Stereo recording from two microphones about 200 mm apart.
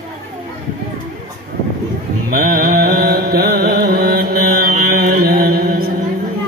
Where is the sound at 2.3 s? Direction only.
45° right (ahead or behind).